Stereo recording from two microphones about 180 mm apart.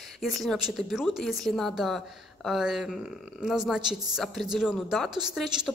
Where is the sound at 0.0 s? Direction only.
Centre (ahead or behind).